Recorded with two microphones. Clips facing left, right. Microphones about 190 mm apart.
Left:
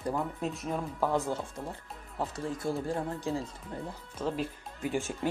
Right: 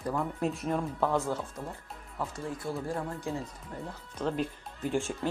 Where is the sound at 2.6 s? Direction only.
30° left (ahead or behind).